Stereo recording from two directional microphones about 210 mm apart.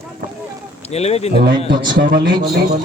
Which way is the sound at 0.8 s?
30° left (ahead or behind).